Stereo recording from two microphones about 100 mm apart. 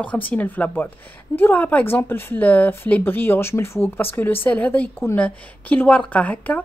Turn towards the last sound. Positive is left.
turn(degrees=15)  # may be behind; listen again after turning